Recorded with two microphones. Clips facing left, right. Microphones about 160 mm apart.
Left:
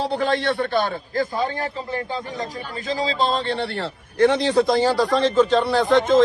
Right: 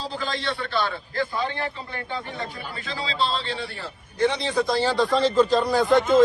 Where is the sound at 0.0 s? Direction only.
70° left (ahead or behind).